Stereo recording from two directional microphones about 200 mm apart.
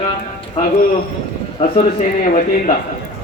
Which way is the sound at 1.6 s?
40° left (ahead or behind).